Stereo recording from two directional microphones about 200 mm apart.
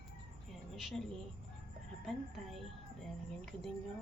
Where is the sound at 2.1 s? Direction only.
Centre (ahead or behind).